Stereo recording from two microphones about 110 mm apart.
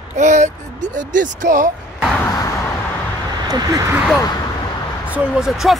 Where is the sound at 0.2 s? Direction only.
90° right.